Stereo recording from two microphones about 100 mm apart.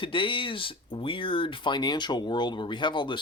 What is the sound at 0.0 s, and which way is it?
Speech, 55° left (ahead or behind).